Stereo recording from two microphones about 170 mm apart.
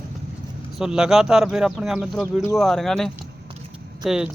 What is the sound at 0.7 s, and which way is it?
A man's voice, 5° right (ahead or behind).